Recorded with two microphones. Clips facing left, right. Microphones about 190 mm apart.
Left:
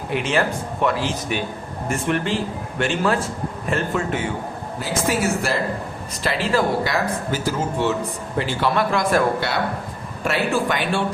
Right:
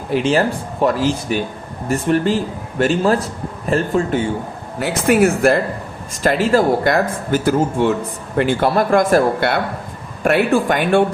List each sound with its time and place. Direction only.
0.1 s speech: 35° right (ahead or behind)
4.8 s speech: 60° right (ahead or behind)
6.2 s speech: 45° right (ahead or behind)